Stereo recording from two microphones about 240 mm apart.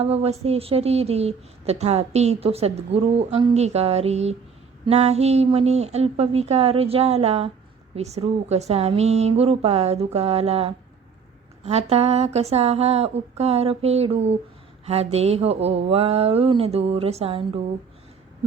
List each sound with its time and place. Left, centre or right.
0.0 s a woman's voice: right